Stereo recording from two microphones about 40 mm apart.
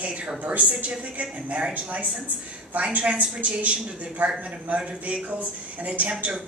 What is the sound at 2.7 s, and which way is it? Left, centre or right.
A woman's voice, right.